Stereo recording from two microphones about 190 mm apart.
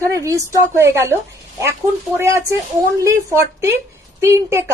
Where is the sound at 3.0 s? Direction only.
15° right (ahead or behind).